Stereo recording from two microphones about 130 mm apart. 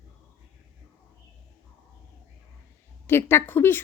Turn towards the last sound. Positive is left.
turn(degrees=15)  # may be behind; listen again after turning